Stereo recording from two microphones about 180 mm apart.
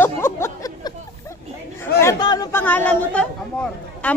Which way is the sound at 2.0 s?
20° left (ahead or behind).